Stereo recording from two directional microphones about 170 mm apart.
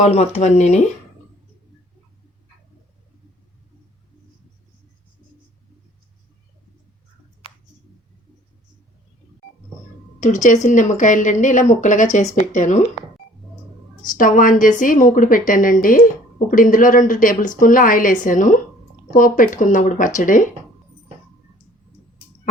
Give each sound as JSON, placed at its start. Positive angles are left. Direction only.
{"t": 0.0, "sound": "speech", "side_deg": 40}
{"t": 10.2, "sound": "a woman's voice", "side_deg": 45}
{"t": 14.0, "sound": "a woman's voice", "side_deg": 50}